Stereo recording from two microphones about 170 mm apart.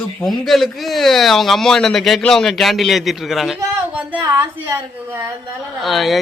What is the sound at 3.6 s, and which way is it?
Speech, 10° right (ahead or behind).